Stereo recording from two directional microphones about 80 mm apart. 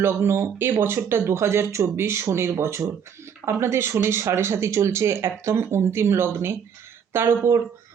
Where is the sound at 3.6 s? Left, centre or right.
Right.